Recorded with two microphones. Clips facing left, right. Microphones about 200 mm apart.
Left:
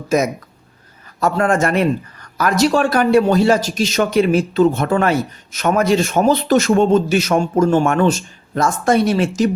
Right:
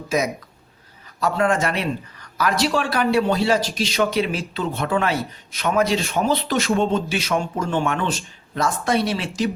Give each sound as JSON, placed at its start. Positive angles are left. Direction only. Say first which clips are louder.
{"t": 1.2, "sound": "speech", "louder": "left 4 dB", "side_deg": 50}